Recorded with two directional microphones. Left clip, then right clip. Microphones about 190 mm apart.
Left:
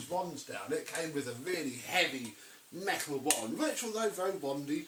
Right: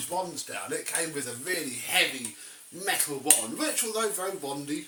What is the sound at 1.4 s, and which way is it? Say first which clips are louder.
Speech: right 5 dB; centre (ahead or behind).